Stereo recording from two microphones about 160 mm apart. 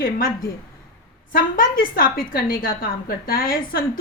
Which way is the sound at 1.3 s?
65° left (ahead or behind).